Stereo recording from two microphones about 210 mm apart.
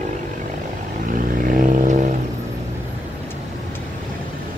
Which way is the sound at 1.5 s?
35° right (ahead or behind).